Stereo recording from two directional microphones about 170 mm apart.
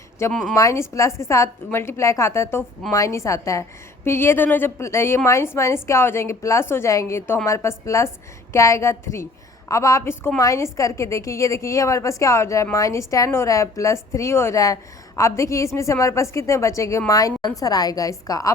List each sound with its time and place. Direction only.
0.2 s a woman's voice: 15° left (ahead or behind)